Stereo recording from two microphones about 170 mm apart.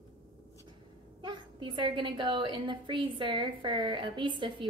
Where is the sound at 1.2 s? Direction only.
30° right (ahead or behind).